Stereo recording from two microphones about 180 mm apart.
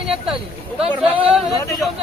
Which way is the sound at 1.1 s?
30° right (ahead or behind).